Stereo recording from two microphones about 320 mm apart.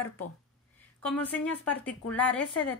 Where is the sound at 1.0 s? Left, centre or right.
Centre.